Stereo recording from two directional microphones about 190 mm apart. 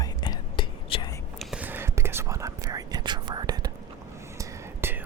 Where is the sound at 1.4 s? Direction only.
5° right (ahead or behind).